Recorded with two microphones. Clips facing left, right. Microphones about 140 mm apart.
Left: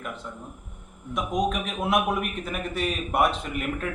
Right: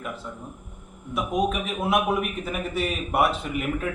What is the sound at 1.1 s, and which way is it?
A man's voice, 5° right (ahead or behind).